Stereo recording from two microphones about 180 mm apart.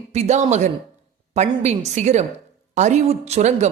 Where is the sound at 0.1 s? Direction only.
40° right (ahead or behind).